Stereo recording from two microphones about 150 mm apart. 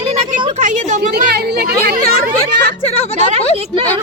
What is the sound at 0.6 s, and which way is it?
Speech, 55° right (ahead or behind).